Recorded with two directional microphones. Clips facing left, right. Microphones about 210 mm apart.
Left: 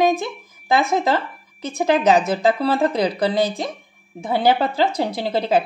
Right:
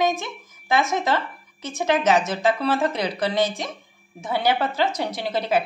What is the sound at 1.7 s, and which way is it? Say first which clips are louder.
Speech: left 4 dB; 35° left (ahead or behind).